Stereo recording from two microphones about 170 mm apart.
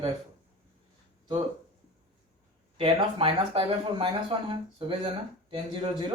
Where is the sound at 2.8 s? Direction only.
30° right (ahead or behind).